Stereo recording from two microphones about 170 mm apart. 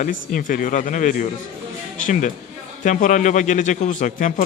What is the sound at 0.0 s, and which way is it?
A man's voice, 50° left (ahead or behind).